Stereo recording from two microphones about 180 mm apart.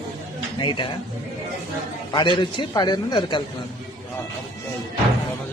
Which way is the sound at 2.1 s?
25° left (ahead or behind).